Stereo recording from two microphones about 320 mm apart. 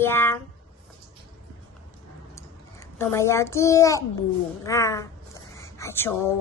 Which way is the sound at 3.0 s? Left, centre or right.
Centre.